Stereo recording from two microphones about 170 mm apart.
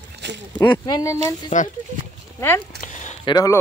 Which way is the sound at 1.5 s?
45° left (ahead or behind).